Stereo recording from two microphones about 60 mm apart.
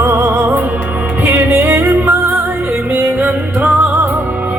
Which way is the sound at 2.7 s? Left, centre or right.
Right.